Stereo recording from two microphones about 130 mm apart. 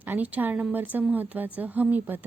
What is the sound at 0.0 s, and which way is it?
Speech, 15° right (ahead or behind).